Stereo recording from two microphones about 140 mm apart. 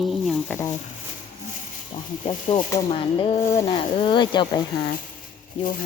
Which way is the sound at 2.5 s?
50° left (ahead or behind).